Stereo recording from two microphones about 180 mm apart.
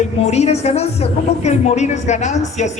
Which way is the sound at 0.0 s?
40° left (ahead or behind).